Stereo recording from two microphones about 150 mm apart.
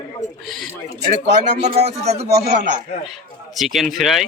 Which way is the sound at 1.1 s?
55° right (ahead or behind).